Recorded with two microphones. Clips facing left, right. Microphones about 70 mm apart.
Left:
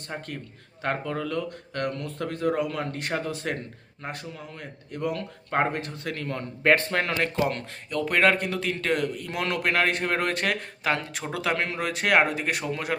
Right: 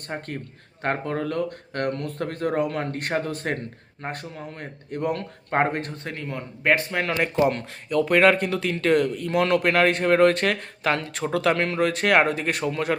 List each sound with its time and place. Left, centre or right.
0.1 s speech: right
6.1 s a man's voice: centre